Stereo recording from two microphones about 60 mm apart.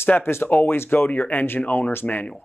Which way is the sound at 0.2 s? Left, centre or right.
Left.